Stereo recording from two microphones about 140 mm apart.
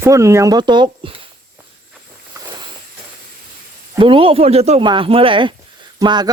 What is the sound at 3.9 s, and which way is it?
Speech, 40° right (ahead or behind).